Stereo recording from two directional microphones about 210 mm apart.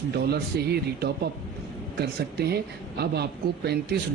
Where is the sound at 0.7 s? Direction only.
50° right (ahead or behind).